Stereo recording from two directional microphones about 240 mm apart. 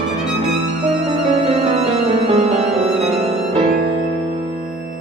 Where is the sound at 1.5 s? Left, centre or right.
Right.